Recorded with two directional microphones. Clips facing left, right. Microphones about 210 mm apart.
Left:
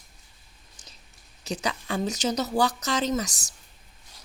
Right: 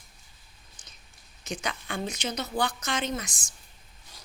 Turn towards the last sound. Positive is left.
turn(degrees=40)  # may be behind; listen again after turning